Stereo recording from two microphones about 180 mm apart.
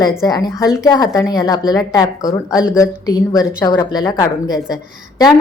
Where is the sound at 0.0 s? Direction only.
20° left (ahead or behind).